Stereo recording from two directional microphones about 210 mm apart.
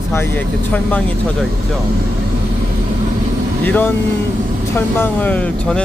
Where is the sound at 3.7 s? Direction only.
10° left (ahead or behind).